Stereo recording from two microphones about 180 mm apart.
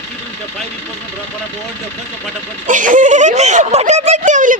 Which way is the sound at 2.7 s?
45° right (ahead or behind).